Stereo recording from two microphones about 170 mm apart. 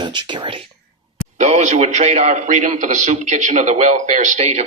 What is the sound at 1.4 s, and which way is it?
A man's voice, 45° right (ahead or behind).